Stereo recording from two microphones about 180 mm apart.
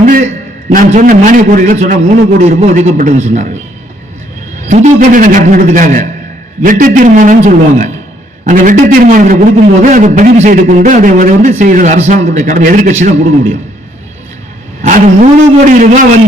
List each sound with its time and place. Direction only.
0.0 s a sound: 50° right (ahead or behind)
0.7 s a man's voice: 45° right (ahead or behind)
4.7 s a man's voice: 40° right (ahead or behind)
14.8 s a man's voice: 45° right (ahead or behind)